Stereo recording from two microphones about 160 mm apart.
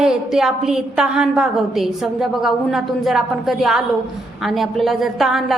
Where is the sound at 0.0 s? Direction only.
5° right (ahead or behind).